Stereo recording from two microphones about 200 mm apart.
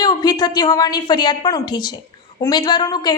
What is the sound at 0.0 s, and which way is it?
A woman's voice, 20° left (ahead or behind).